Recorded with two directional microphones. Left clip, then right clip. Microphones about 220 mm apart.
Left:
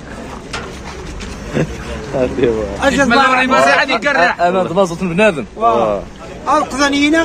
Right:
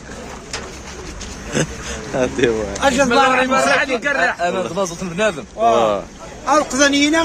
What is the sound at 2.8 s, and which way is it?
Speech, 25° right (ahead or behind).